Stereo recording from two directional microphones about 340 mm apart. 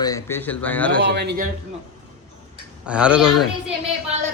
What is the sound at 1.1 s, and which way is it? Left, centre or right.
Speech, right.